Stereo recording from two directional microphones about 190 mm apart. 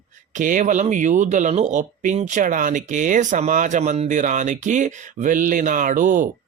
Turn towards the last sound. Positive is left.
turn(degrees=-45)  # may be behind; listen again after turning